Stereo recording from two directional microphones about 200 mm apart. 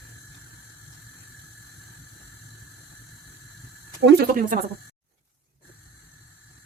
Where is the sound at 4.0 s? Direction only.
55° right (ahead or behind).